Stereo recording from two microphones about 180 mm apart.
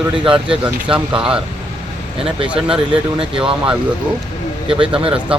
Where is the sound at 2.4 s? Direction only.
5° right (ahead or behind).